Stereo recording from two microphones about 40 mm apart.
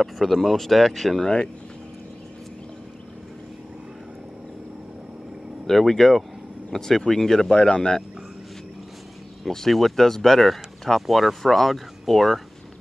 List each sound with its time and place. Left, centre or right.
0.0 s speech: centre
1.2 s speech: left
5.7 s speech: centre
9.5 s speech: centre